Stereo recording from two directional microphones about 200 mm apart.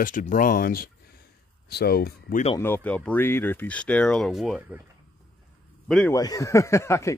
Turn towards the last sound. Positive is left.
turn(degrees=15)  # may be behind; listen again after turning